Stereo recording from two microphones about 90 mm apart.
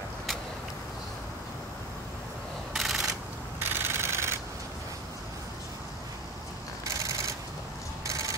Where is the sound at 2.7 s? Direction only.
Centre (ahead or behind).